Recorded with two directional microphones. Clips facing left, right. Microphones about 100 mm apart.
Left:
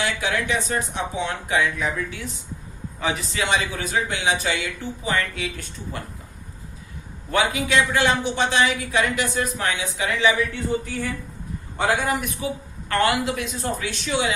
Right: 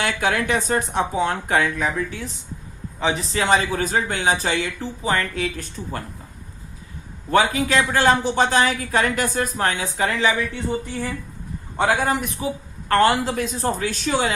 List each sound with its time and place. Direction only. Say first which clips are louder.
0.0 s speech: right 3 dB; 50° right (ahead or behind)
2.0 s a woman's voice: right 3 dB; 35° right (ahead or behind)
7.3 s a woman's voice: right 4 dB; 35° right (ahead or behind)
11.8 s a woman's voice: right 2 dB; 30° right (ahead or behind)